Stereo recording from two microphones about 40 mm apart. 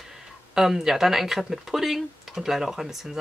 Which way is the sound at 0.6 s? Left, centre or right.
Centre.